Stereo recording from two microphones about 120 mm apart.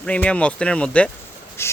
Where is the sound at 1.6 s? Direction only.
20° left (ahead or behind).